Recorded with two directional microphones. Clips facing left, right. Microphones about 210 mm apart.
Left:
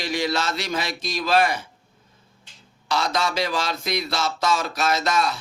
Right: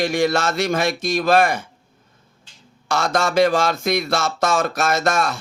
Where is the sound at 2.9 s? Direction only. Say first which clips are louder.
Right 5 dB; 50° right (ahead or behind).